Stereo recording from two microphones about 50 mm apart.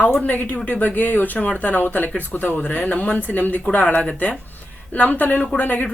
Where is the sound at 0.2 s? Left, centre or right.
Left.